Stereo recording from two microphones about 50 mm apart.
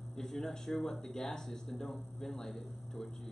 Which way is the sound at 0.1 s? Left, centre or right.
Centre.